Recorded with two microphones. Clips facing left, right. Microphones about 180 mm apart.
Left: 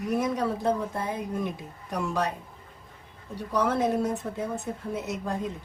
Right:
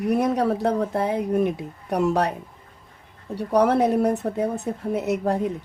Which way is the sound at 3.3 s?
65° right (ahead or behind).